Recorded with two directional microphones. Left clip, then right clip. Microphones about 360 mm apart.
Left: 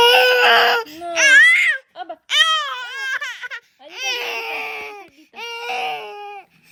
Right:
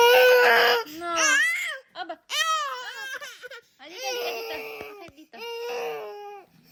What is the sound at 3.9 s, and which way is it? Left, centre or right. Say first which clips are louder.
Baby cry: left 7 dB; centre.